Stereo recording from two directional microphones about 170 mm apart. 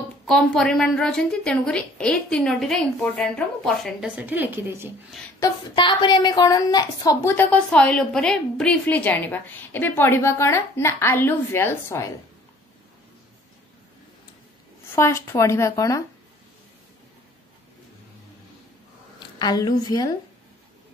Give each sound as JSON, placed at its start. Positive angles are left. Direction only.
{"t": 0.3, "sound": "a woman's voice", "side_deg": 5}
{"t": 5.8, "sound": "a woman's voice", "side_deg": 25}
{"t": 15.0, "sound": "a woman's voice", "side_deg": 15}
{"t": 19.1, "sound": "speech", "side_deg": 25}